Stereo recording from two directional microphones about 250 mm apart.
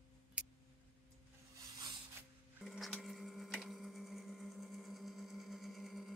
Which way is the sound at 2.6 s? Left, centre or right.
Centre.